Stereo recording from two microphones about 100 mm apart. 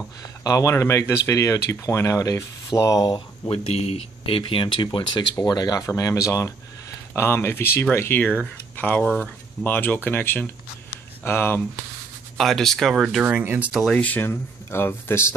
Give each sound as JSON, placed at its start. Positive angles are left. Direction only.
{"t": 0.2, "sound": "speech", "side_deg": 35}
{"t": 3.4, "sound": "speech", "side_deg": 90}
{"t": 5.3, "sound": "speech", "side_deg": 40}
{"t": 12.4, "sound": "speech", "side_deg": 0}
{"t": 13.2, "sound": "speech", "side_deg": -20}
{"t": 13.8, "sound": "speech", "side_deg": 15}